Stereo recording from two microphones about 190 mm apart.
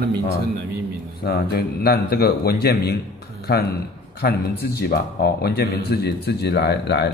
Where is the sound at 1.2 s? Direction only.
55° left (ahead or behind).